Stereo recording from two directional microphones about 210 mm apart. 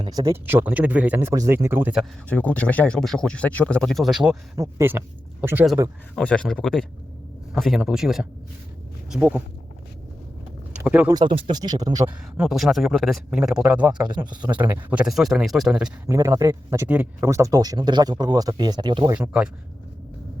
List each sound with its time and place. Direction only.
0.0 s speech: 20° right (ahead or behind)
2.3 s speech: 5° left (ahead or behind)
4.5 s speech: 15° right (ahead or behind)
6.1 s speech: 5° left (ahead or behind)
10.8 s speech: 5° right (ahead or behind)
11.1 s speech: 20° right (ahead or behind)
12.4 s speech: centre (ahead or behind)
16.1 s speech: 15° right (ahead or behind)
19.1 s speech: 5° right (ahead or behind)